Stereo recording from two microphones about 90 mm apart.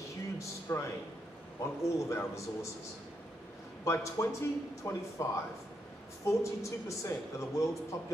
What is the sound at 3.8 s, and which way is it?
Speech, 35° left (ahead or behind).